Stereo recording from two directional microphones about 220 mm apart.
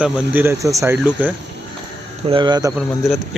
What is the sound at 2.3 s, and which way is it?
Speech, 20° right (ahead or behind).